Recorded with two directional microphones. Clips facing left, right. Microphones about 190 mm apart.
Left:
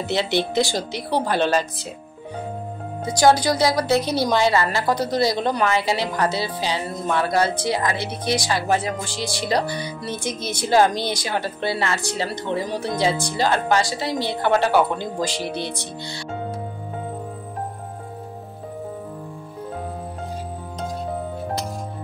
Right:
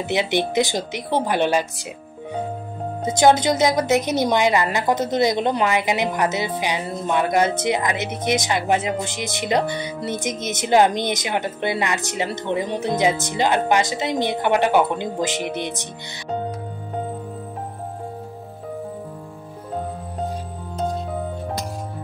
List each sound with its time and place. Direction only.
0.0 s speech: 15° right (ahead or behind)
3.1 s a woman's voice: 20° right (ahead or behind)